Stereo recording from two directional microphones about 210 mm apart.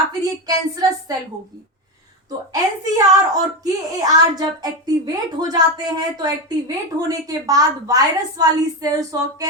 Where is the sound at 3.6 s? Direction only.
15° right (ahead or behind).